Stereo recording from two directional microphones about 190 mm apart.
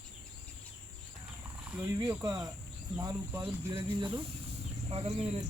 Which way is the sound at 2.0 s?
20° right (ahead or behind).